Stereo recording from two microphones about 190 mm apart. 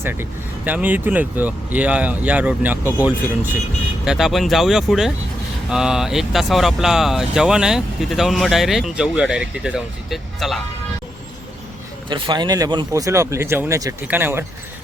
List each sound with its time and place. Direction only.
0.0 s speech: 10° right (ahead or behind)
12.0 s speech: 25° right (ahead or behind)